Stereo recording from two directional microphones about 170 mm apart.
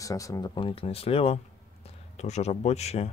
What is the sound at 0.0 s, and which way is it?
Speech, 20° left (ahead or behind).